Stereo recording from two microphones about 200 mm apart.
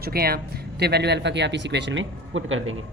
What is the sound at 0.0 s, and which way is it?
Speech, 50° right (ahead or behind).